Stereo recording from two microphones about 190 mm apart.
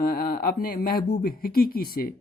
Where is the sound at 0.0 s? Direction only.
50° left (ahead or behind).